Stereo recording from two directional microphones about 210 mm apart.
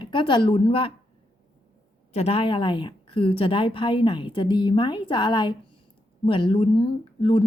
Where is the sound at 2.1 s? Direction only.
30° left (ahead or behind).